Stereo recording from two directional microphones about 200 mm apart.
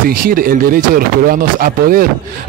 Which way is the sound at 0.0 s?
45° right (ahead or behind).